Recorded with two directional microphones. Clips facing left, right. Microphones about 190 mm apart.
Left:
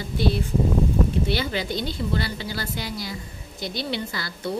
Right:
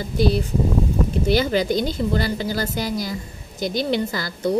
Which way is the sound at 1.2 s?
40° right (ahead or behind).